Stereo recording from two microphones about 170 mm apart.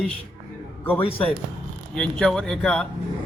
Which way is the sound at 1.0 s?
30° left (ahead or behind).